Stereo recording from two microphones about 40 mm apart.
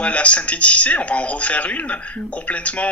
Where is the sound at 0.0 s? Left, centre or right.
Left.